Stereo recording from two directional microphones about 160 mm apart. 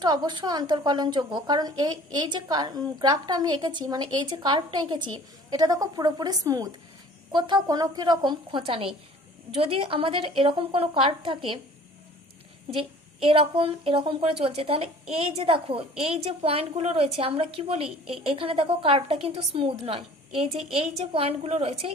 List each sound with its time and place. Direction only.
0.0 s a woman's voice: 25° right (ahead or behind)
13.2 s a woman's voice: 35° right (ahead or behind)